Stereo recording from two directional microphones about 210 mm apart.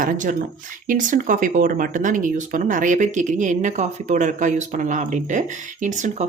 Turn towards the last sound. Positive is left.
turn(degrees=-35)  # may be behind; listen again after turning